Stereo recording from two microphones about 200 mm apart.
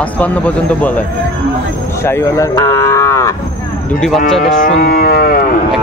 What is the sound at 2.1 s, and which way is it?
Moo, 15° left (ahead or behind).